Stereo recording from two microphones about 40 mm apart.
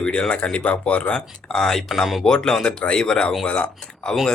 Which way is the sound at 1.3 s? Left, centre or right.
Centre.